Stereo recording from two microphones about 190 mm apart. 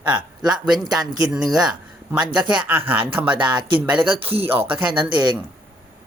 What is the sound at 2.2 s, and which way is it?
Speech, 25° right (ahead or behind).